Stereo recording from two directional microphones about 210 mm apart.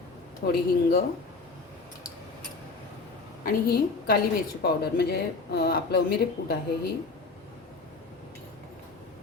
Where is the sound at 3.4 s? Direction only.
45° left (ahead or behind).